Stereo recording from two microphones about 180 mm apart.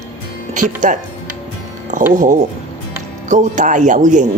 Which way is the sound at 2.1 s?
45° right (ahead or behind).